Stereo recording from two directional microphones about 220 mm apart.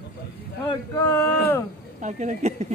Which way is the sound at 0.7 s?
15° left (ahead or behind).